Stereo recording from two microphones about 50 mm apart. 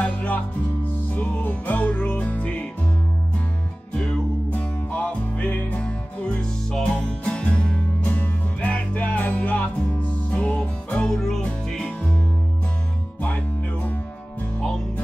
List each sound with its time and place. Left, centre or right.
0.0 s music: left
4.5 s music: left
8.0 s music: left
8.5 s music: left
11.1 s music: centre